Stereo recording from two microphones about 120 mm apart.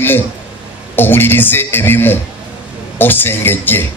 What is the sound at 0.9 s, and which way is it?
A man's voice, 15° left (ahead or behind).